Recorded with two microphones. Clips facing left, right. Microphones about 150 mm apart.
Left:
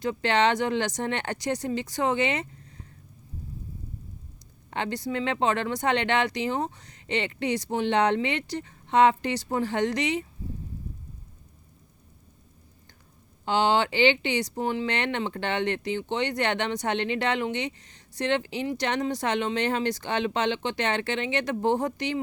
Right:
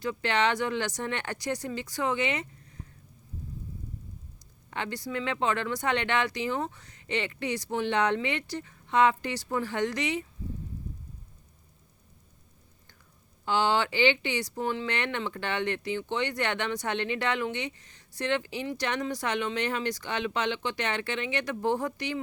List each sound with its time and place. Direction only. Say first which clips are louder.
0.0 s speech: left 4 dB; 25° left (ahead or behind)
4.7 s speech: left 4 dB; 25° left (ahead or behind)
6.6 s speech: left 3 dB; 40° left (ahead or behind)
6.8 s speech: left 3 dB; 25° left (ahead or behind)
13.4 s speech: left 3 dB; 20° left (ahead or behind)